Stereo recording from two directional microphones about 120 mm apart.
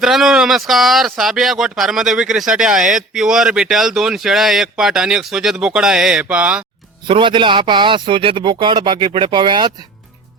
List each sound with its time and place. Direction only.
0.0 s speech: 5° right (ahead or behind)
7.1 s speech: 45° right (ahead or behind)